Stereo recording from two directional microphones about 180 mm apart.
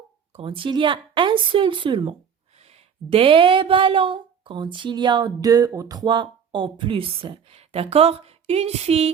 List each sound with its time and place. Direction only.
0.3 s speech: 30° right (ahead or behind)